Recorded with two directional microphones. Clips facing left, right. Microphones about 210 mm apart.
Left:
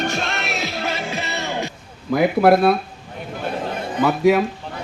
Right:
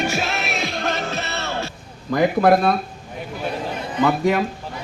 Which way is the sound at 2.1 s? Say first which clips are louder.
Left 1 dB; 5° left (ahead or behind).